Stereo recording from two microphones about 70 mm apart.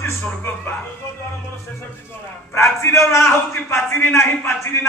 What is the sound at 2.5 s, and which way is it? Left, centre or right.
A man's voice, left.